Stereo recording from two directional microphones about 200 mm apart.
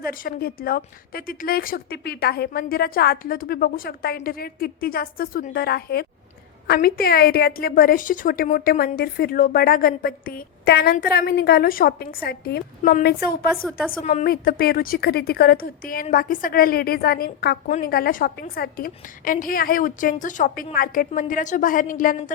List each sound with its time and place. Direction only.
0.0 s a woman's voice: 45° left (ahead or behind)
13.5 s speech: centre (ahead or behind)
14.0 s a woman's voice: 35° left (ahead or behind)
14.3 s a woman's voice: 50° left (ahead or behind)